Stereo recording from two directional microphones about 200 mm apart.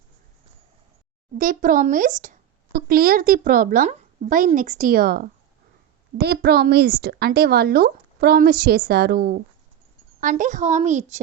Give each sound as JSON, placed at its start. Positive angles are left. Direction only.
{"t": 1.4, "sound": "a woman's voice", "side_deg": -45}